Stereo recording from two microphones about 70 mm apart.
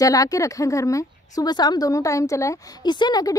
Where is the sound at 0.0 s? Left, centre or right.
Left.